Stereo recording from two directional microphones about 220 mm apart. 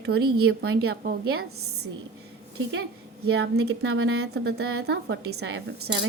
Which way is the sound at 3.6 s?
65° right (ahead or behind).